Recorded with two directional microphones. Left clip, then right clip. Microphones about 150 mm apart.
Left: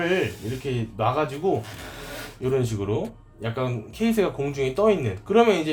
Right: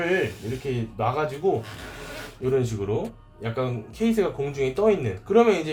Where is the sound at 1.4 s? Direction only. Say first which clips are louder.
Even; 35° left (ahead or behind).